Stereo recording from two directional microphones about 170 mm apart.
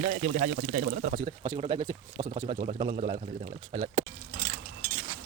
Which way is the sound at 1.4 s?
30° right (ahead or behind).